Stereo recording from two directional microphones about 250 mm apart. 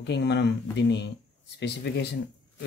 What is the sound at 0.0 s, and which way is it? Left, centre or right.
Speech, left.